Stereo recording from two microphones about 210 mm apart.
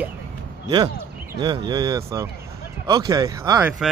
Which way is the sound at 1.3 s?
20° right (ahead or behind).